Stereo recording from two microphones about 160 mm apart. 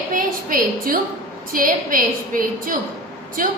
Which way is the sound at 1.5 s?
60° right (ahead or behind).